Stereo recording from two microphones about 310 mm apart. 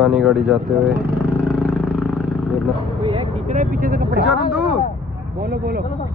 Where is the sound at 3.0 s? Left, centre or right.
Centre.